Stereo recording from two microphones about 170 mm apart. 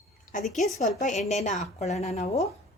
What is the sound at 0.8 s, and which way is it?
A woman's voice, 45° left (ahead or behind).